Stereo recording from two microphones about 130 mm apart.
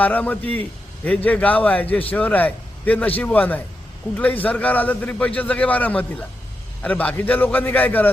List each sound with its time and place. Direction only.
0.0 s a man's voice: 10° left (ahead or behind)